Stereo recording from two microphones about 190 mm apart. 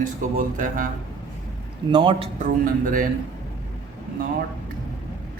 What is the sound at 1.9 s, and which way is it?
Speech, 25° right (ahead or behind).